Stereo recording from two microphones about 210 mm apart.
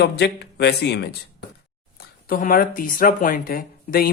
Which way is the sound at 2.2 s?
45° left (ahead or behind).